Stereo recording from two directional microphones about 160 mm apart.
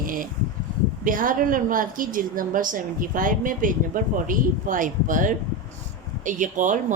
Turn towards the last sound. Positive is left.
turn(degrees=-50)  # may be behind; listen again after turning